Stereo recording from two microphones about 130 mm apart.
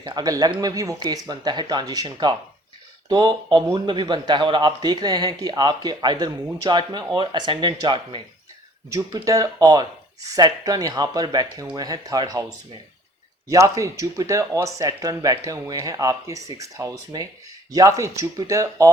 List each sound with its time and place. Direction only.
0.0 s speech: 30° right (ahead or behind)
8.9 s speech: 25° right (ahead or behind)
13.5 s speech: 25° right (ahead or behind)